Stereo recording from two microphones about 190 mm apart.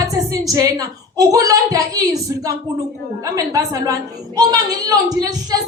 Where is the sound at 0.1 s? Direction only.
20° right (ahead or behind).